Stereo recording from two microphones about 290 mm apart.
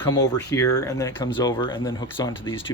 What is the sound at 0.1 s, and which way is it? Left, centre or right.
Speech, centre.